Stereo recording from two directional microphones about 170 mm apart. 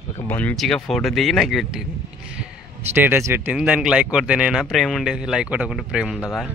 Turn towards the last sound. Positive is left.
turn(degrees=0)  # may be behind; listen again after turning